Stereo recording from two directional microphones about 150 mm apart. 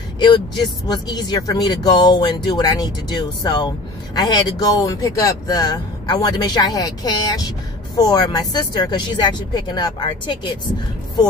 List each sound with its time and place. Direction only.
0.8 s speech: 25° left (ahead or behind)